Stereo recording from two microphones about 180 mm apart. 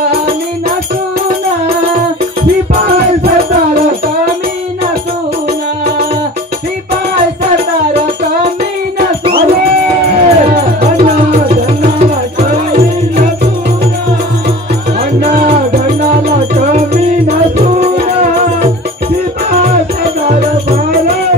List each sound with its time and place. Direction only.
10.2 s music: 40° right (ahead or behind)
15.1 s music: 45° right (ahead or behind)
20.2 s music: 55° right (ahead or behind)